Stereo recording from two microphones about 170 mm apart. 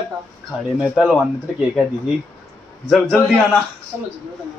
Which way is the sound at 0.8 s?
Centre (ahead or behind).